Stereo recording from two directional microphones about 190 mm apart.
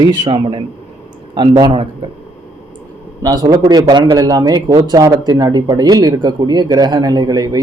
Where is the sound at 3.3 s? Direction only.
20° right (ahead or behind).